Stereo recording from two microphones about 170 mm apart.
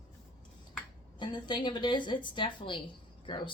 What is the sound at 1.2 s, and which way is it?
Speech, 25° left (ahead or behind).